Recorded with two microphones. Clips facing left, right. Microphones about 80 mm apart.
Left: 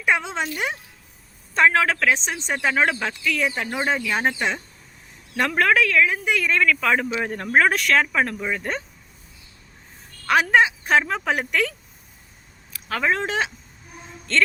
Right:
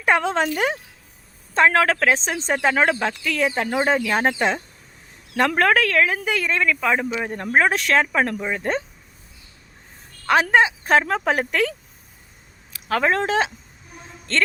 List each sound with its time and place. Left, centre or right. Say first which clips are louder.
0.0 s speech: right 4 dB; right; by 7.6 s centre
7.6 s speech: even; right
10.5 s speech: even; right
12.9 s speech: right 3 dB; right